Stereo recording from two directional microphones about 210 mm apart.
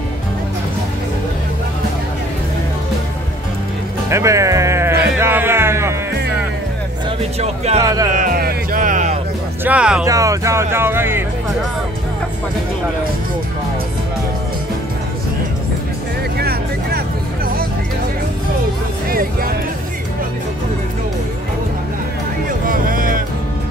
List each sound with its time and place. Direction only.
4.1 s music: 15° right (ahead or behind)
7.3 s speech: 30° right (ahead or behind)
7.8 s speech: 15° right (ahead or behind)
8.2 s music: 45° right (ahead or behind)
9.7 s speech: 5° right (ahead or behind)
10.0 s speech: 15° right (ahead or behind)
16.3 s vehicle: 45° right (ahead or behind)
19.0 s music: 45° right (ahead or behind)
22.7 s music: 40° right (ahead or behind)